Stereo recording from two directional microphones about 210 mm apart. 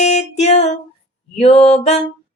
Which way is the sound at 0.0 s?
30° left (ahead or behind).